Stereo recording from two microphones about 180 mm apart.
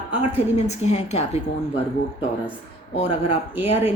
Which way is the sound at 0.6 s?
40° left (ahead or behind).